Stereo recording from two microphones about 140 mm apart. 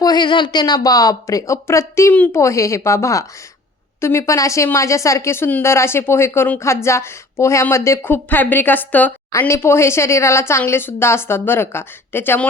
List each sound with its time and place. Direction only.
0.0 s a woman's voice: 30° left (ahead or behind); by 12.5 s 15° left (ahead or behind)